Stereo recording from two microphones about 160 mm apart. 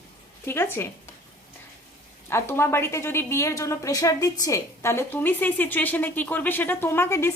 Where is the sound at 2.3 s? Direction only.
15° left (ahead or behind).